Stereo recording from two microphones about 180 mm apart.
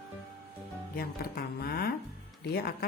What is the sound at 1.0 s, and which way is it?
A woman's voice, 60° left (ahead or behind).